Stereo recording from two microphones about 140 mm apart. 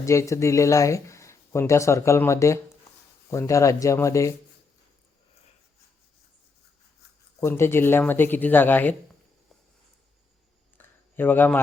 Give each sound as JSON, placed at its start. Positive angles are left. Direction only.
{"t": 0.0, "sound": "speech", "side_deg": 20}
{"t": 7.4, "sound": "speech", "side_deg": 20}
{"t": 10.8, "sound": "a sound", "side_deg": 15}